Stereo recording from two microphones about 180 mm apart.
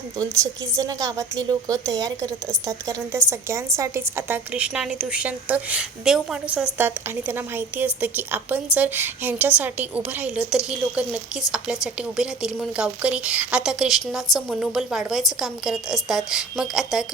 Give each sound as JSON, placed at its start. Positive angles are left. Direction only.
{"t": 0.8, "sound": "a woman's voice", "side_deg": -20}